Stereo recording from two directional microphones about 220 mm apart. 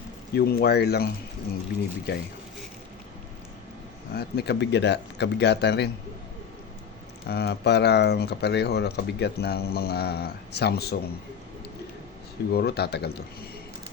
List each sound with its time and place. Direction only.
0.3 s speech: 45° left (ahead or behind)
4.1 s speech: 45° left (ahead or behind)
7.3 s speech: 45° left (ahead or behind)
12.5 s speech: 45° left (ahead or behind)